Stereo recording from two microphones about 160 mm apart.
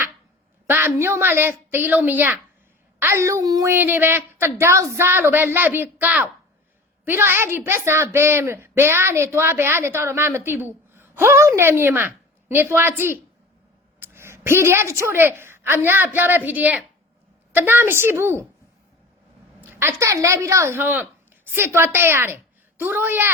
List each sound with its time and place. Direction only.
0.7 s a woman's voice: 15° right (ahead or behind)
19.7 s a woman's voice: 15° right (ahead or behind)